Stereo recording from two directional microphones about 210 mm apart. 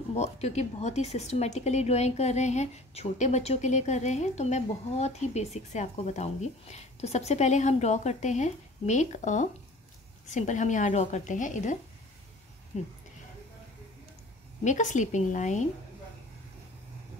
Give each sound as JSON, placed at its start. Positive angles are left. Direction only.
{"t": 0.1, "sound": "speech", "side_deg": 35}
{"t": 14.6, "sound": "speech", "side_deg": 35}